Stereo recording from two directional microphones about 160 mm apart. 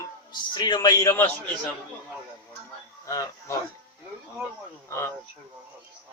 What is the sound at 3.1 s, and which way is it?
Speech, 20° left (ahead or behind).